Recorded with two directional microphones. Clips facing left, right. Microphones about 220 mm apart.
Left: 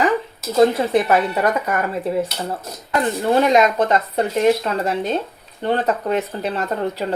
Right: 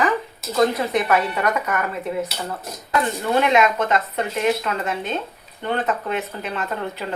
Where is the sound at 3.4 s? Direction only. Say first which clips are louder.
Left 2 dB; 35° left (ahead or behind).